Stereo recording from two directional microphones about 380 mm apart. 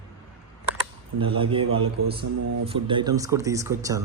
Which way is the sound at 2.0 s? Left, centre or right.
Right.